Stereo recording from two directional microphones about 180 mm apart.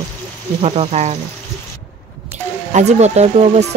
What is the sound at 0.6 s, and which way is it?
Speech, 35° right (ahead or behind).